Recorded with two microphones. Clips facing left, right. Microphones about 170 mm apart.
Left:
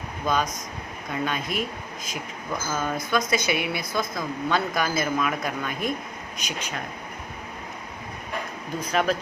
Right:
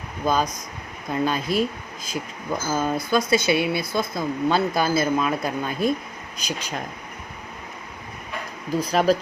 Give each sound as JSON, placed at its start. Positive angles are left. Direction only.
{"t": 0.2, "sound": "speech", "side_deg": -35}
{"t": 8.8, "sound": "speech", "side_deg": -35}